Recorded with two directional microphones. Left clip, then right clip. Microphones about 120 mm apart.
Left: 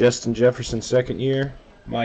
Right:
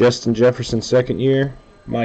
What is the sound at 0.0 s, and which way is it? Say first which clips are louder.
Speech: right 3 dB; 5° right (ahead or behind).